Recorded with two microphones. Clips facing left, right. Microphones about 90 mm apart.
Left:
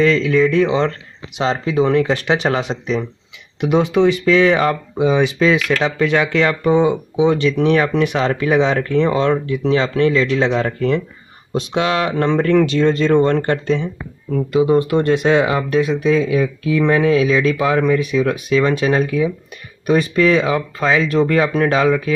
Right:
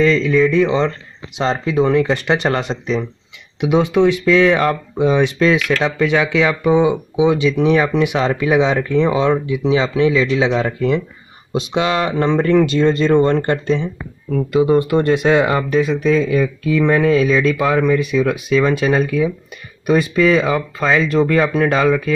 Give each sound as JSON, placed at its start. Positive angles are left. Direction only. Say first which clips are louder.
{"t": 0.1, "sound": "speech", "louder": "right 1 dB", "side_deg": 70}
{"t": 1.3, "sound": "speech", "louder": "even", "side_deg": 0}